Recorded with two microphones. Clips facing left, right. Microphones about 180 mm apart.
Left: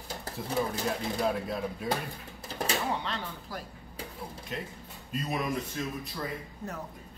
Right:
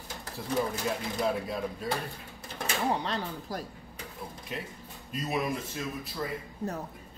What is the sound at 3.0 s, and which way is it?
Speech, 40° right (ahead or behind).